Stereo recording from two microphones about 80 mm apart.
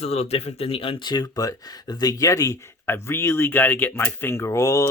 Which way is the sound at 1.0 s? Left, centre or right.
Left.